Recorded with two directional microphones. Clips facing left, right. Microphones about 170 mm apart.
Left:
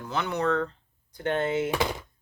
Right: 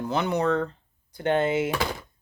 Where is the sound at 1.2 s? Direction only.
80° right.